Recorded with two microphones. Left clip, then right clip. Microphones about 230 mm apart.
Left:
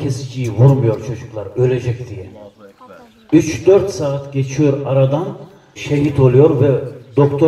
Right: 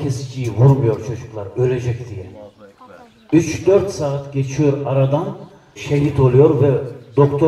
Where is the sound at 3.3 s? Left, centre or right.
Left.